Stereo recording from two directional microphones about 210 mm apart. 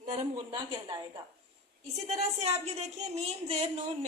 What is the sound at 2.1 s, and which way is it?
Speech, 30° right (ahead or behind).